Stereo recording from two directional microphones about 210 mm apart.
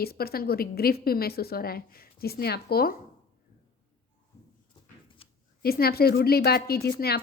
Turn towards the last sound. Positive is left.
turn(degrees=50)  # may be behind; listen again after turning